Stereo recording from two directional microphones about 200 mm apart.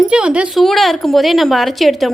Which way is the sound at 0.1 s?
5° right (ahead or behind).